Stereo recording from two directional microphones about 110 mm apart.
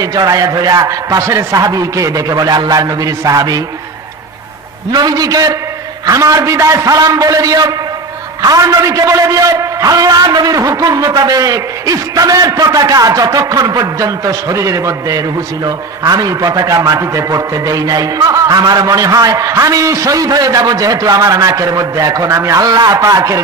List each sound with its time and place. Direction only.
0.0 s a man's voice: 35° right (ahead or behind)
4.9 s a man's voice: 35° right (ahead or behind)